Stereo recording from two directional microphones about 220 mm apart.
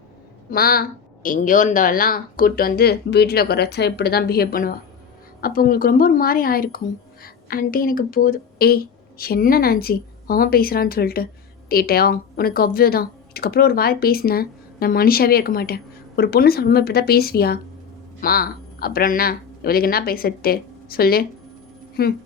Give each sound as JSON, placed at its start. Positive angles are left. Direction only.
{"t": 0.5, "sound": "a woman's voice", "side_deg": 45}